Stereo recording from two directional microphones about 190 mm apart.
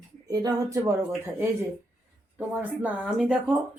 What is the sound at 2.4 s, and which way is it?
Speech, 5° right (ahead or behind).